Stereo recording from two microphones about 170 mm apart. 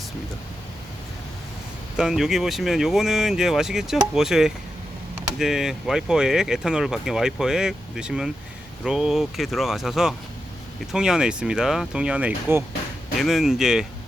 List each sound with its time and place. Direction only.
2.0 s speech: centre (ahead or behind)
13.1 s speech: centre (ahead or behind)